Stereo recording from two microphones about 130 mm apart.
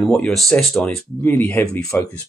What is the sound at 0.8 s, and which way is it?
Speech, 15° left (ahead or behind).